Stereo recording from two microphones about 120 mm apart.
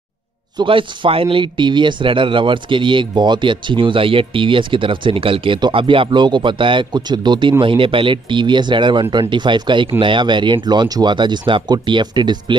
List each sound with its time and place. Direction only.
0.6 s speech: 45° right (ahead or behind)